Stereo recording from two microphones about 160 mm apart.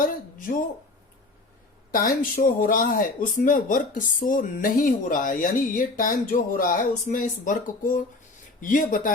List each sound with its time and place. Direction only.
0.0 s speech: 60° left (ahead or behind)
1.9 s speech: 60° left (ahead or behind)